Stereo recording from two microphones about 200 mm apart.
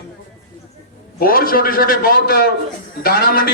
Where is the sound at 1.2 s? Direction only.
45° left (ahead or behind).